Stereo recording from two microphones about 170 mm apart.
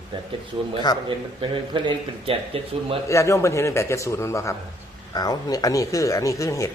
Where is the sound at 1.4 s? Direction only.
30° right (ahead or behind).